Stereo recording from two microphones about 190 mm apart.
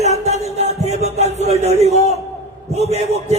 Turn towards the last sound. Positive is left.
turn(degrees=-35)  # may be behind; listen again after turning